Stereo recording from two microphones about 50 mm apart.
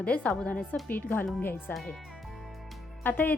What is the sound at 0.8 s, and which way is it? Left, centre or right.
Speech, left.